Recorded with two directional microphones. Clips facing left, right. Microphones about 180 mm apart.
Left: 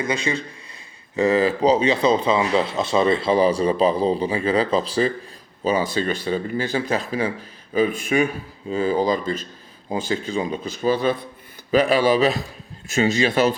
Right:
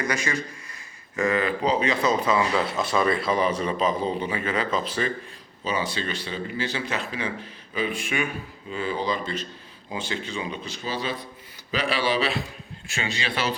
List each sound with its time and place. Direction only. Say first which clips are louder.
0.0 s a man's voice: left 4 dB; 25° left (ahead or behind)
1.2 s speech: left 6 dB; 35° left (ahead or behind)